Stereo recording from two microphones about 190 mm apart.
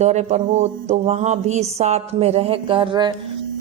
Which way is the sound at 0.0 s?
35° right (ahead or behind).